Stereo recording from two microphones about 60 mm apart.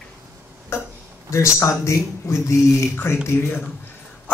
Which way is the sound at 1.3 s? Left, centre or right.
Left.